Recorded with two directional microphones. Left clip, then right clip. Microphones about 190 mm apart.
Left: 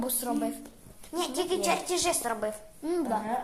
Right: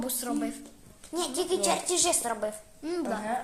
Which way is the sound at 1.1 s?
Centre (ahead or behind).